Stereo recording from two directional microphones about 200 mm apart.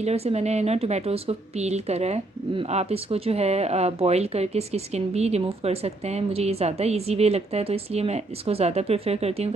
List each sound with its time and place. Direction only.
0.0 s speech: 30° right (ahead or behind)